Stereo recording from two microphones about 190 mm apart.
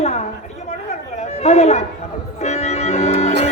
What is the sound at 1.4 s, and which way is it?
Speech, 35° left (ahead or behind).